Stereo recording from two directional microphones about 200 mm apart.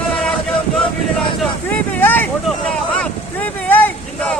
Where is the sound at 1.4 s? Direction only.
10° left (ahead or behind).